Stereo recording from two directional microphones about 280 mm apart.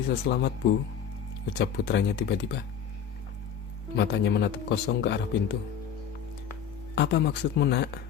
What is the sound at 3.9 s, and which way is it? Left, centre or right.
Speech, left.